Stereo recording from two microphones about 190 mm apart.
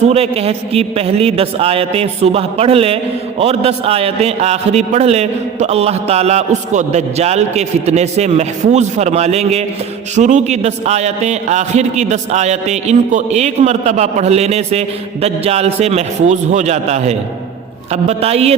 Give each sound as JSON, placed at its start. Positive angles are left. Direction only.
{"t": 0.1, "sound": "a man's voice", "side_deg": -30}